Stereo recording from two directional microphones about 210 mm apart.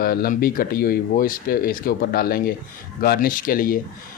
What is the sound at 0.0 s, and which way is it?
Speech, 45° left (ahead or behind).